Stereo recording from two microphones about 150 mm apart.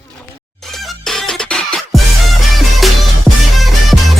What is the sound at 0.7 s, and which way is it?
Music, centre (ahead or behind).